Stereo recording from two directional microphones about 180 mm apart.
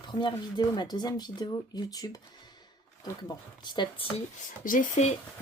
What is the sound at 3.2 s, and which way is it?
Speech, 25° left (ahead or behind).